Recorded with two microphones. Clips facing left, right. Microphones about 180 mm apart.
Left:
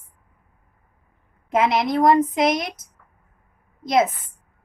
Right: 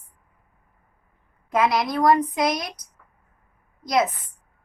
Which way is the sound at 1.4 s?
25° left (ahead or behind).